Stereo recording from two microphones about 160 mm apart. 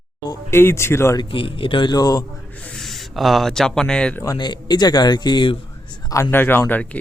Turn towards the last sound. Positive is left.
turn(degrees=10)  # may be behind; listen again after turning